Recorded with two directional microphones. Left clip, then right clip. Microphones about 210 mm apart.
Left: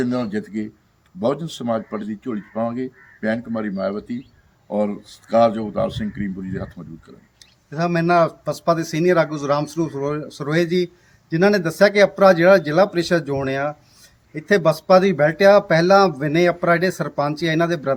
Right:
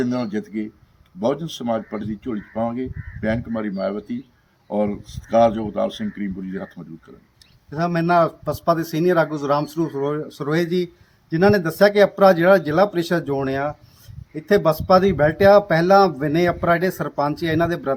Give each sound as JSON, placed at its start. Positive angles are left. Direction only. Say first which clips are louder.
{"t": 0.0, "sound": "speech", "louder": "left 1 dB", "side_deg": 0}
{"t": 7.7, "sound": "speech", "louder": "left 1 dB", "side_deg": 15}